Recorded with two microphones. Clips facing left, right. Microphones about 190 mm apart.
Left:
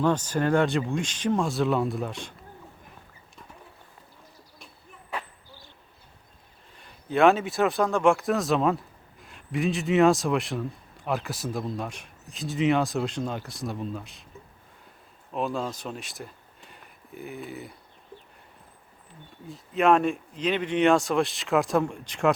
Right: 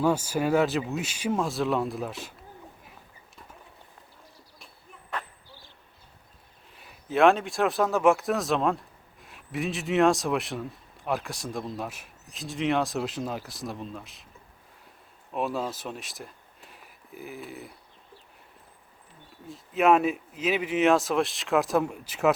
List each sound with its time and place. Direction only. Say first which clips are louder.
0.0 s speech: left 1 dB; 10° right (ahead or behind)
5.1 s a sound: left 1 dB; 10° left (ahead or behind)
6.7 s speech: even; 5° right (ahead or behind)
15.3 s speech: even; 5° right (ahead or behind)
19.5 s speech: even; centre (ahead or behind)